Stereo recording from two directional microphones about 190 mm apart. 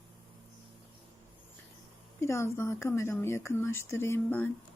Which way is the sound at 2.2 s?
15° left (ahead or behind).